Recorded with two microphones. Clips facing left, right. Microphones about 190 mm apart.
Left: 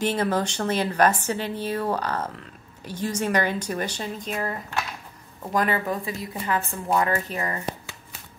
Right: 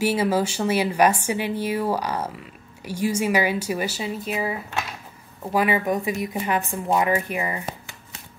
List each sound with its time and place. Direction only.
0.0 s a woman's voice: 10° right (ahead or behind)